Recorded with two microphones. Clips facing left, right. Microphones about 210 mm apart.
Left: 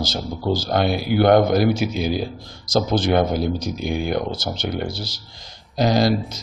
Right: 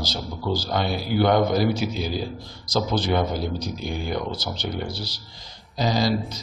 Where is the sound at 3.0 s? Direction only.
75° left (ahead or behind); by 5.1 s 45° left (ahead or behind).